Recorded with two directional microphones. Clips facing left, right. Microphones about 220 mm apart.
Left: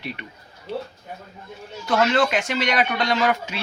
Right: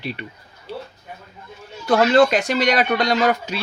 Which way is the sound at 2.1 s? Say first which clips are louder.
Right 6 dB; 40° right (ahead or behind).